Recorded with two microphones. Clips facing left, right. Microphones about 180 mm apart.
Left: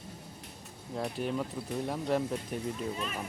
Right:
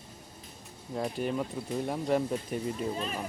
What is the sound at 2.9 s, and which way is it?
Speech, 35° right (ahead or behind).